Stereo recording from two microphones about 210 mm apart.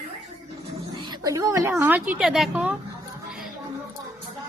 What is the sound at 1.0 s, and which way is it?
A woman's voice, 20° right (ahead or behind).